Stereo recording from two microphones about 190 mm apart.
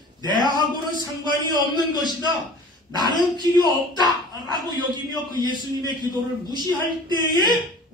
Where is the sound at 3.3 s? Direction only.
20° right (ahead or behind).